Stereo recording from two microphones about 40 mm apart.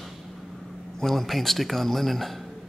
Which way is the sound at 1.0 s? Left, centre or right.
Centre.